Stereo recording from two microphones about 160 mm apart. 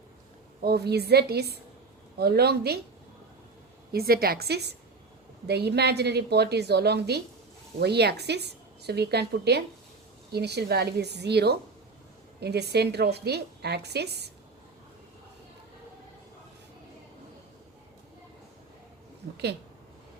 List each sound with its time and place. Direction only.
0.6 s a woman's voice: 85° right
2.1 s a woman's voice: 80° right
3.9 s a woman's voice: 70° right (ahead or behind); by 14.3 s 90° right